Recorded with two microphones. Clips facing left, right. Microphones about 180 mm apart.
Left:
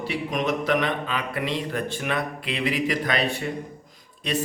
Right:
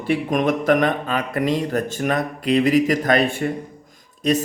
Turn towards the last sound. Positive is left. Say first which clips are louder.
# right 8 dB
turn(degrees=-45)  # may be behind; listen again after turning